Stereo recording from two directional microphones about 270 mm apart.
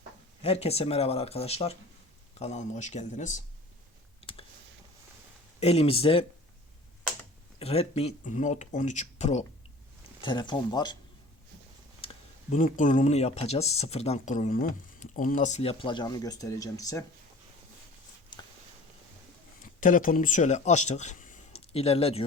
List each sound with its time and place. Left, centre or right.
0.4 s speech: left
5.5 s speech: left
7.6 s speech: left
12.0 s speech: left
19.6 s speech: left